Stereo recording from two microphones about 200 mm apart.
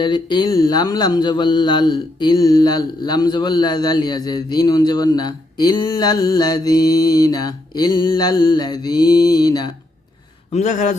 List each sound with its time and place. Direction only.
0.0 s speech: 20° left (ahead or behind)
10.5 s a man's voice: 35° left (ahead or behind)